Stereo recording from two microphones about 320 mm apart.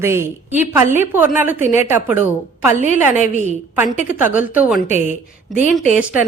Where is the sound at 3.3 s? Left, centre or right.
Right.